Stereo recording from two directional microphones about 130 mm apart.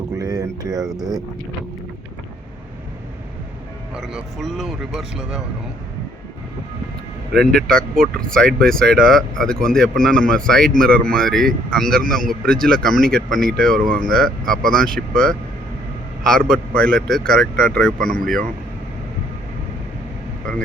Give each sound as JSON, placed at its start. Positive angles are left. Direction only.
{"t": 0.2, "sound": "a sound", "side_deg": -30}
{"t": 3.9, "sound": "speech", "side_deg": 0}
{"t": 7.3, "sound": "speech", "side_deg": 5}